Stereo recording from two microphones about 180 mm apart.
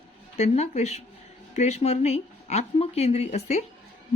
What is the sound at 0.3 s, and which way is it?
A woman's voice, 35° left (ahead or behind).